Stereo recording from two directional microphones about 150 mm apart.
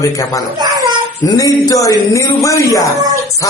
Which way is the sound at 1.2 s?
25° left (ahead or behind).